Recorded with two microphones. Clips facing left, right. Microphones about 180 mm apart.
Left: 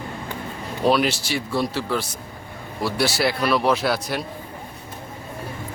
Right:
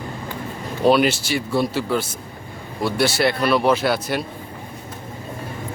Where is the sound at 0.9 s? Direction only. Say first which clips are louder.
Right 3 dB; centre (ahead or behind).